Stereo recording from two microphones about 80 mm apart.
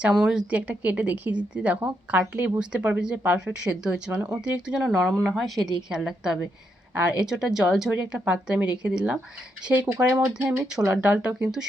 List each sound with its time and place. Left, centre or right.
0.0 s a woman's voice: centre